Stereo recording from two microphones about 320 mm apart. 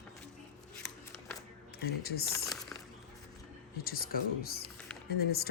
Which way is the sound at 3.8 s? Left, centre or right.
Left.